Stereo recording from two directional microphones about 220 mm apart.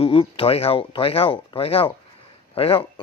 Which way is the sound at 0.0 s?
25° left (ahead or behind).